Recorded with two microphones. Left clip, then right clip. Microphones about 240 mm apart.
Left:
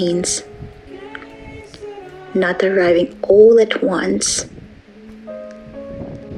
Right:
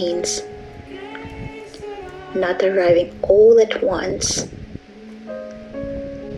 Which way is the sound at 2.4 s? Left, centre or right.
Left.